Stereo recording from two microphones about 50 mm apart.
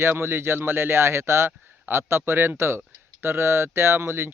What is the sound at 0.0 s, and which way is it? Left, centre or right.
Speech, right.